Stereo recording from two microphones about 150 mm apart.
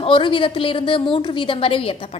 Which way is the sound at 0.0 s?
35° left (ahead or behind).